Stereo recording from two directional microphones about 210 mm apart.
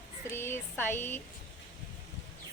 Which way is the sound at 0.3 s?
10° left (ahead or behind).